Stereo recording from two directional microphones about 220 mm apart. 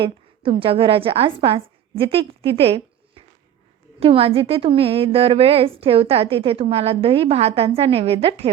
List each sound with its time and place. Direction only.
0.6 s a woman's voice: 25° right (ahead or behind)